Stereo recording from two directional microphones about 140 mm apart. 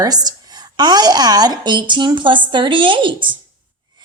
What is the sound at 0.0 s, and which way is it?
A woman's voice, 30° right (ahead or behind).